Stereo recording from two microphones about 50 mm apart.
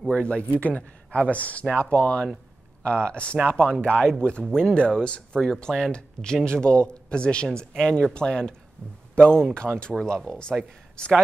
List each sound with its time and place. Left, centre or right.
0.1 s a man's voice: left
5.4 s a man's voice: centre